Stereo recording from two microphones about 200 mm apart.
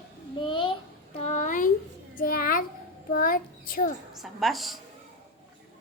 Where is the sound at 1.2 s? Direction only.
35° left (ahead or behind).